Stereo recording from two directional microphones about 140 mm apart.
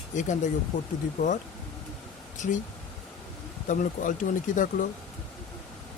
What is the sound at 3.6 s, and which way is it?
Speech, 70° left (ahead or behind).